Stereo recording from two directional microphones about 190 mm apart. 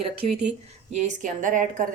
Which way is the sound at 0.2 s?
35° right (ahead or behind).